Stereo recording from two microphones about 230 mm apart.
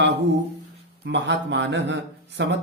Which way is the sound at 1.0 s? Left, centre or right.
Right.